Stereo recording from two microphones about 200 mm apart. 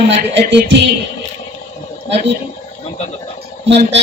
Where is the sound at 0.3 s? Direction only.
60° right (ahead or behind).